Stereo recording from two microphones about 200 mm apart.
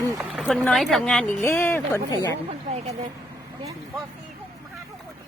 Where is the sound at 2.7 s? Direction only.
30° right (ahead or behind).